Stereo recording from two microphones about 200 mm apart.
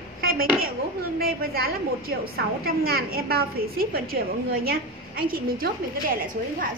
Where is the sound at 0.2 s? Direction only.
50° right (ahead or behind).